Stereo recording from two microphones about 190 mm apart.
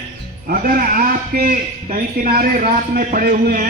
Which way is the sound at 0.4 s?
50° right (ahead or behind).